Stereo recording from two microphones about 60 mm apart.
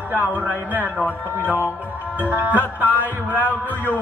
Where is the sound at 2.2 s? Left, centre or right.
Right.